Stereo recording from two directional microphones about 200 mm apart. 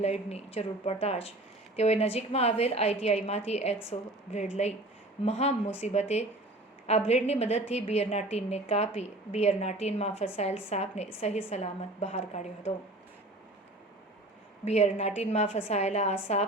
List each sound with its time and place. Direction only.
0.0 s a woman's voice: 30° left (ahead or behind)
14.6 s a woman's voice: 30° left (ahead or behind)